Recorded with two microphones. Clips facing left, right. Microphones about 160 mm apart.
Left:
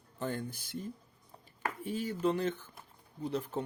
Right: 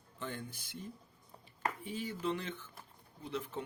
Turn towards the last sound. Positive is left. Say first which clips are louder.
# left 5 dB
turn(degrees=40)  # may be behind; listen again after turning